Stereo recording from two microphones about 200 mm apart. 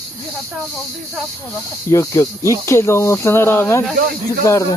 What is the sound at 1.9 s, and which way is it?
Speech, 15° left (ahead or behind).